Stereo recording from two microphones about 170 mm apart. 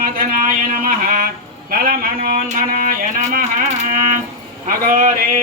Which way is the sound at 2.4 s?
55° right (ahead or behind).